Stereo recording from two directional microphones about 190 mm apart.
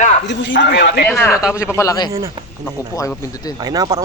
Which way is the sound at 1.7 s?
15° left (ahead or behind).